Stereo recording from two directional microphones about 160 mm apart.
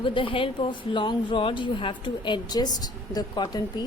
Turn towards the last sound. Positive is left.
turn(degrees=25)  # may be behind; listen again after turning